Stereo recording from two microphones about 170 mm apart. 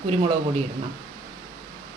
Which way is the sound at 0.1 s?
35° right (ahead or behind).